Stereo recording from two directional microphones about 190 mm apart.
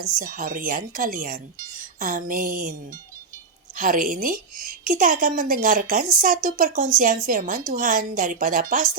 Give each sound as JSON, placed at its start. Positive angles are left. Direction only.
{"t": 0.2, "sound": "a woman's voice", "side_deg": -50}
{"t": 3.8, "sound": "a woman's voice", "side_deg": -45}